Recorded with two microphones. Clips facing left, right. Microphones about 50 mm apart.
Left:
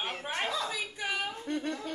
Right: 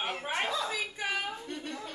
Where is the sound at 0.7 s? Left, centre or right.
Centre.